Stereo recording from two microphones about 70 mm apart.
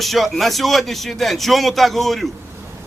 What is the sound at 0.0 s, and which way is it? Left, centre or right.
A man's voice, centre.